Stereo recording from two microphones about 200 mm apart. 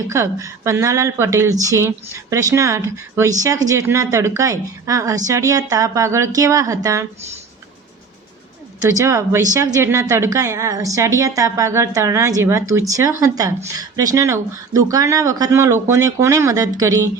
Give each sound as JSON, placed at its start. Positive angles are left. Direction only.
{"t": 0.1, "sound": "speech", "side_deg": -15}
{"t": 8.8, "sound": "speech", "side_deg": -15}